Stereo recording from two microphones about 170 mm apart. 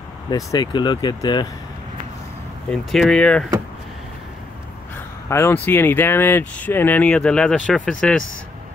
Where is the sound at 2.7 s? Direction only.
Centre (ahead or behind).